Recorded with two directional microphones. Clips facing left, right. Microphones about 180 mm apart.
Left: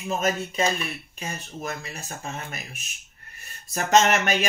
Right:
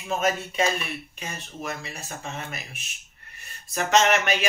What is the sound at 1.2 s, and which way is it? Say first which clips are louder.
Speech: left 6 dB; 40° left (ahead or behind).